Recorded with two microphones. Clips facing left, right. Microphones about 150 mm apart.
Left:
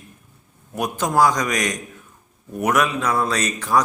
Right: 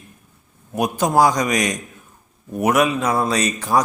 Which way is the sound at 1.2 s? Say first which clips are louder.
Right 1 dB; 35° right (ahead or behind).